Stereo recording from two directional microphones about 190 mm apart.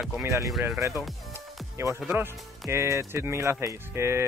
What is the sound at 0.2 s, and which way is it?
Speech, 10° right (ahead or behind).